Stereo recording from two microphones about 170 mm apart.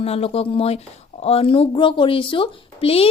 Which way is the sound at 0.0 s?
35° left (ahead or behind).